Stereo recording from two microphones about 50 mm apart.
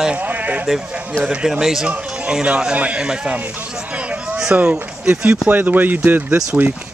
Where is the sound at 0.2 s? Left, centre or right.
Right.